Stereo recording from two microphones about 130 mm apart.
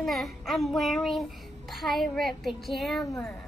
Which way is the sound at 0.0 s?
Centre (ahead or behind).